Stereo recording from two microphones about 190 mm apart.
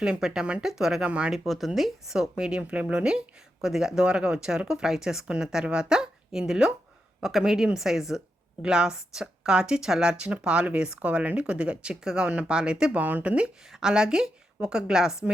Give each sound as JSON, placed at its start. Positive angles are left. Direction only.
{"t": 0.0, "sound": "speech", "side_deg": -5}